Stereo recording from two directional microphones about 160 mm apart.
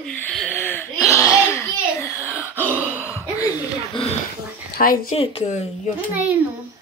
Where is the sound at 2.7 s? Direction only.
10° right (ahead or behind).